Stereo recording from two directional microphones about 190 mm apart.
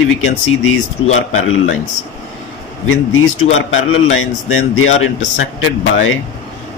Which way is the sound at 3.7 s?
90° left.